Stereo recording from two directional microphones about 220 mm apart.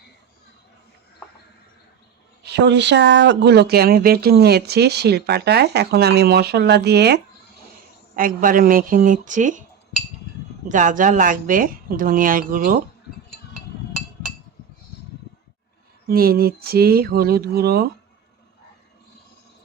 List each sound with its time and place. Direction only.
2.4 s speech: 50° right (ahead or behind); by 9.6 s 35° right (ahead or behind)
10.7 s speech: 35° right (ahead or behind)
16.0 s speech: 45° right (ahead or behind)